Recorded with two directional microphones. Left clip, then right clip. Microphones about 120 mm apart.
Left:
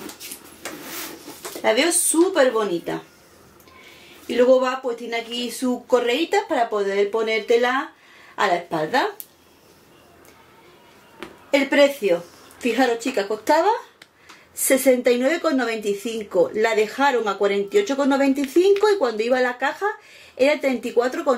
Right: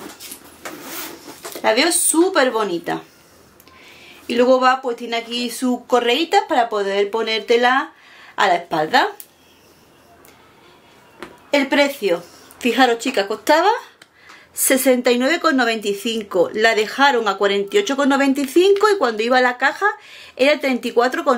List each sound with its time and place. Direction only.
1.6 s speech: 30° right (ahead or behind)
4.3 s speech: 30° right (ahead or behind)
11.5 s speech: 30° right (ahead or behind)